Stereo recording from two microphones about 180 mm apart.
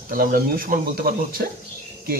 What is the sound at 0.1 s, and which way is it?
Speech, 55° right (ahead or behind).